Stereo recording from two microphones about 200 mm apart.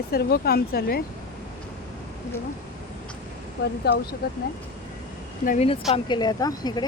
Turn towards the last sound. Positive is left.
turn(degrees=20)  # may be behind; listen again after turning